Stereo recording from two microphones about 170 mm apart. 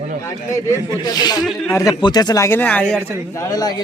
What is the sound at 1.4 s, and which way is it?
Speech, centre (ahead or behind).